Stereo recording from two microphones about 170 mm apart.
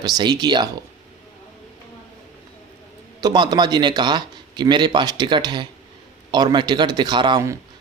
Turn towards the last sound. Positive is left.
turn(degrees=-20)  # may be behind; listen again after turning